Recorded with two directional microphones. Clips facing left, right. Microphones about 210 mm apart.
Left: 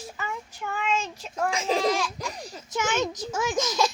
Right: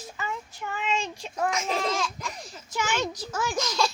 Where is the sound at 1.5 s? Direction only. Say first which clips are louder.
Left 4 dB; 30° left (ahead or behind).